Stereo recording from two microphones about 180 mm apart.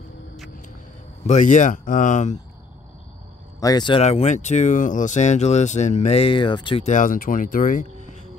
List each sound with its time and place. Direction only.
1.2 s speech: 40° left (ahead or behind)
3.5 s speech: 20° left (ahead or behind)
6.9 s speech: 45° left (ahead or behind)